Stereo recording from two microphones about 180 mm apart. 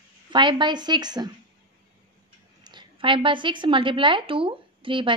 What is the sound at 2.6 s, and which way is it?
A woman's voice, 25° right (ahead or behind).